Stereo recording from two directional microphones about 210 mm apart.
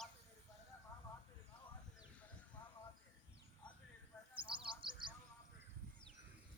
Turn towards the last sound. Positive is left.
turn(degrees=-25)  # may be behind; listen again after turning